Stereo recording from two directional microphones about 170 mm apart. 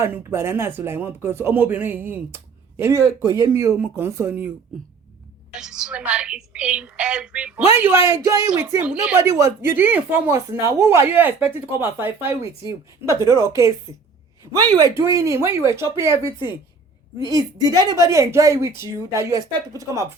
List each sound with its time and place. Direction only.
0.0 s speech: 15° right (ahead or behind)
5.5 s a woman's voice: 5° right (ahead or behind); by 20.1 s 20° right (ahead or behind)